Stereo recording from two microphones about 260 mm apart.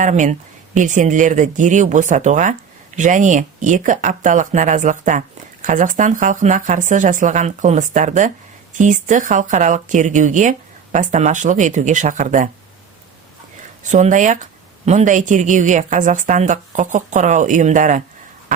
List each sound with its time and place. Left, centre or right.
0.0 s speech: right
13.8 s speech: right